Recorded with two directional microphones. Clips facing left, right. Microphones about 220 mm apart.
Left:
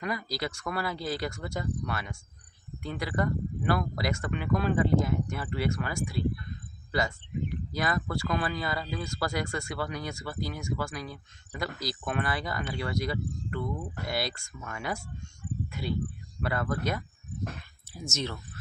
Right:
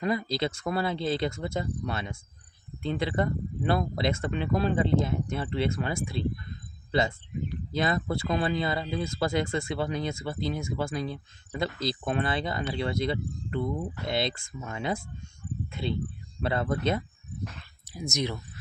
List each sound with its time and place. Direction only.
0.0 s speech: 25° right (ahead or behind)
18.1 s speech: 15° right (ahead or behind)